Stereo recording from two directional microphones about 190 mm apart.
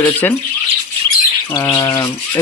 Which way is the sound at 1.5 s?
15° left (ahead or behind).